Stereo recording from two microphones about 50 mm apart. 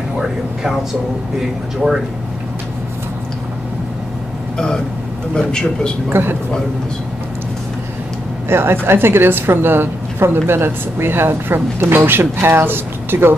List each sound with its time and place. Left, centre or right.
1.4 s speech: centre
4.6 s a man's voice: centre
6.0 s a woman's voice: right
8.5 s a woman's voice: right